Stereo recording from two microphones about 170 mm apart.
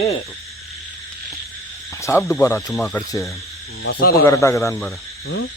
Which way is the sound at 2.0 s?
15° left (ahead or behind).